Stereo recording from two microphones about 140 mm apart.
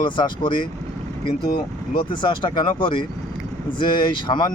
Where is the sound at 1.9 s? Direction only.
35° left (ahead or behind).